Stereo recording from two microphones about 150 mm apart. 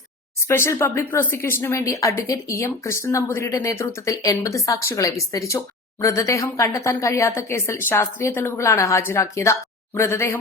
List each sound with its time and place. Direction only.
0.4 s speech: 15° left (ahead or behind)